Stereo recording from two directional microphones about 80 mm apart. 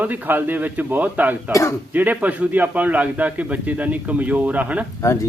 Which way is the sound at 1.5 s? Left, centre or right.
Left.